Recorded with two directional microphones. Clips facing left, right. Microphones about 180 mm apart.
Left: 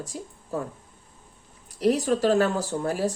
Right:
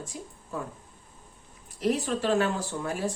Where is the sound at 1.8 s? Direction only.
40° left (ahead or behind).